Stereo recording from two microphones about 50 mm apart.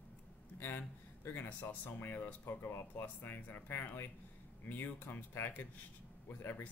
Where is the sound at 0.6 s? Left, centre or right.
Left.